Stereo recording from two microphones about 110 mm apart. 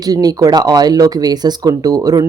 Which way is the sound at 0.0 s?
35° right (ahead or behind).